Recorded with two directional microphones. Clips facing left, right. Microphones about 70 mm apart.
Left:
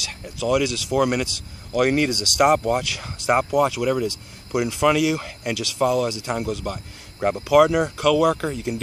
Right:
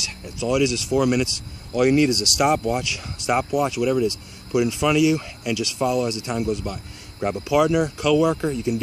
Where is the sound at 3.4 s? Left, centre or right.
Left.